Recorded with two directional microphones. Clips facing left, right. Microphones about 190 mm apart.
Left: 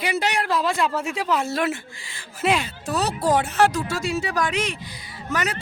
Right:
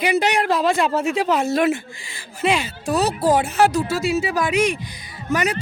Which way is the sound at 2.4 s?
Centre (ahead or behind).